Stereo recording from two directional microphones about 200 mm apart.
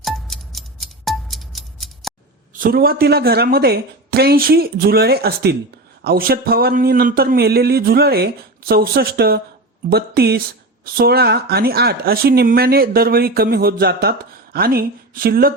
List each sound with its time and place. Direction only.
0.0 s music: centre (ahead or behind)
2.5 s speech: 45° right (ahead or behind)